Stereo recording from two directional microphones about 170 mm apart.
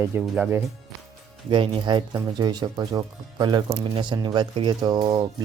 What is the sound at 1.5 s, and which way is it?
Speech, 30° right (ahead or behind).